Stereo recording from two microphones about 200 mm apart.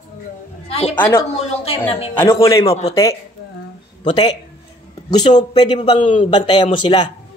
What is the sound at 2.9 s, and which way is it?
A man's voice, 15° left (ahead or behind).